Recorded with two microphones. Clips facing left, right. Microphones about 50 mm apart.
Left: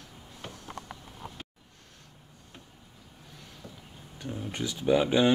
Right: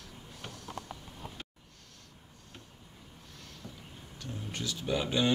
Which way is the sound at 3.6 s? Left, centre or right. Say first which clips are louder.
Left 1 dB; centre.